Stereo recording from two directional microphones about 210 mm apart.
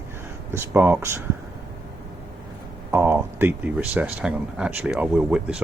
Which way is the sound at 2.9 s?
10° right (ahead or behind).